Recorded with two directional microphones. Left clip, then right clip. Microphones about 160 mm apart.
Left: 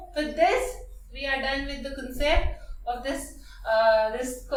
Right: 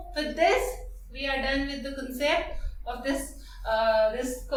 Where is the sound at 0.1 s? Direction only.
15° right (ahead or behind).